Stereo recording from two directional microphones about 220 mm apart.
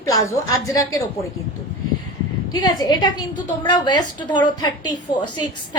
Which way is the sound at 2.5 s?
20° left (ahead or behind).